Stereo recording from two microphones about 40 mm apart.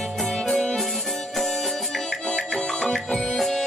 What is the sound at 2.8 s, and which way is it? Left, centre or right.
Music, centre.